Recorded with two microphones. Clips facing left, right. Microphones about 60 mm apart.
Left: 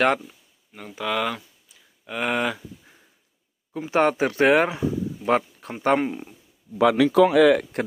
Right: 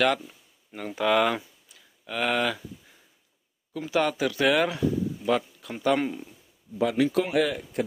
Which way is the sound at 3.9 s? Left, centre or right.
Left.